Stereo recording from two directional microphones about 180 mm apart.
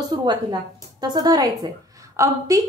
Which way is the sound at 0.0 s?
25° right (ahead or behind).